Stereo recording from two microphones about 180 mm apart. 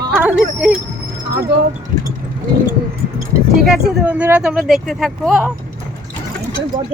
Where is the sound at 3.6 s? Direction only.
Centre (ahead or behind).